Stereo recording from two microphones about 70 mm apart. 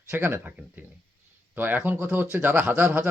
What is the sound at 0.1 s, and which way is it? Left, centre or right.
Speech, right.